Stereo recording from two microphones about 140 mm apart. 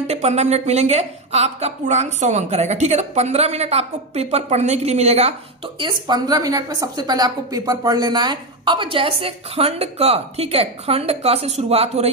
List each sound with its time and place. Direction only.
0.0 s a woman's voice: 50° right (ahead or behind)
5.8 s a woman's voice: 30° right (ahead or behind); by 12.1 s 50° right (ahead or behind)